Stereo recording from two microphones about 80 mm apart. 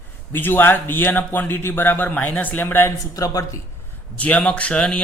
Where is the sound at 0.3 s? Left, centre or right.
Left.